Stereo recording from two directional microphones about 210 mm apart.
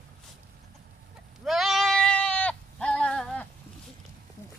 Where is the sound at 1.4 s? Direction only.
Centre (ahead or behind).